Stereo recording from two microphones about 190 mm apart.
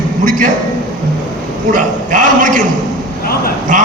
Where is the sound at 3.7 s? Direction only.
40° right (ahead or behind).